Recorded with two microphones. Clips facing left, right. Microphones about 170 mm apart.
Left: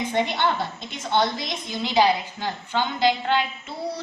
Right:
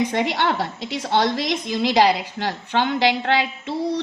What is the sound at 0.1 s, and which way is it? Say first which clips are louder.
A woman's voice: right 2 dB; 80° right.